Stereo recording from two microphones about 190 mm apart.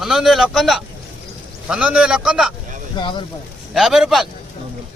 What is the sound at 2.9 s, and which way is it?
Speech, 25° left (ahead or behind).